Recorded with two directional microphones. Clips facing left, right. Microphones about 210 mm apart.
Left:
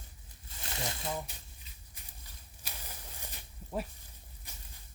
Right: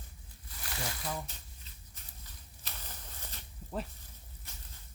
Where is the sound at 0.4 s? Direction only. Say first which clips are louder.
Left 1 dB; 25° left (ahead or behind).